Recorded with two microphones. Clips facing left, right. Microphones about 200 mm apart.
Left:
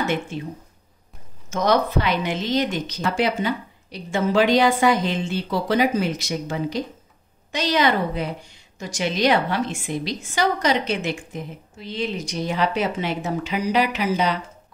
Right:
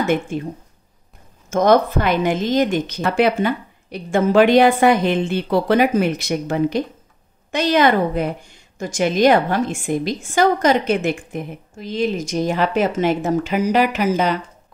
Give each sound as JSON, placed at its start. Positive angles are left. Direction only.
{"t": 0.0, "sound": "a woman's voice", "side_deg": -50}
{"t": 1.5, "sound": "a woman's voice", "side_deg": -50}